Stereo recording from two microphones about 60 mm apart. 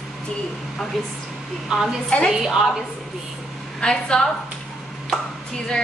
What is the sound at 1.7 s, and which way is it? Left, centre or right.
A woman's voice, centre.